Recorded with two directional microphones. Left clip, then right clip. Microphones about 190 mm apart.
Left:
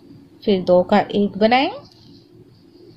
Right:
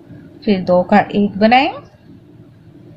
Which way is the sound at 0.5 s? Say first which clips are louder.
Right 2 dB; 25° left (ahead or behind).